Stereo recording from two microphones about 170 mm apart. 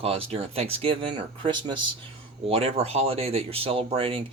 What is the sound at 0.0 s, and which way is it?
Speech, 35° right (ahead or behind).